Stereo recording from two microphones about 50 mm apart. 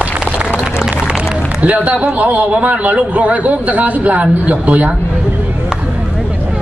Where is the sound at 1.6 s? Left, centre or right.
Right.